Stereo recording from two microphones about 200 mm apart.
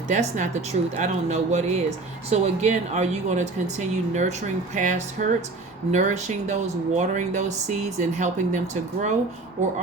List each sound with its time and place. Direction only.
0.1 s speech: 35° right (ahead or behind)